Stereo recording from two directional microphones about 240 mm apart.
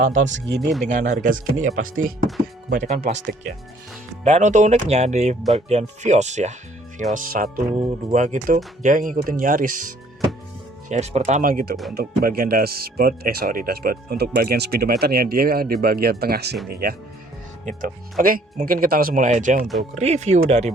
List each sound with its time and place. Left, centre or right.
0.0 s speech: right
0.9 s speech: right
4.2 s speech: right